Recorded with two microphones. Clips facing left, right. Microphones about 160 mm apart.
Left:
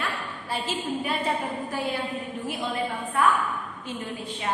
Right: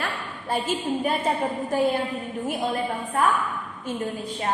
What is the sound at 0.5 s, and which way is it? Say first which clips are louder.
Speech: right 5 dB; 45° right (ahead or behind).